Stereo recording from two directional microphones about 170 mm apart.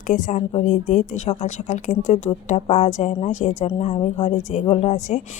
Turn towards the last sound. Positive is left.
turn(degrees=45)  # may be behind; listen again after turning